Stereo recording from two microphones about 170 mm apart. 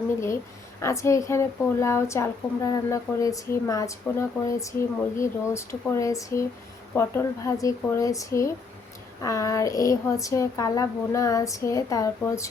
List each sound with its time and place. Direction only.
0.8 s a woman's voice: 15° left (ahead or behind)